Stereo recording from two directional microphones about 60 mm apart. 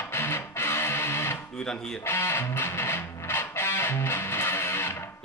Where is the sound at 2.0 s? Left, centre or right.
Left.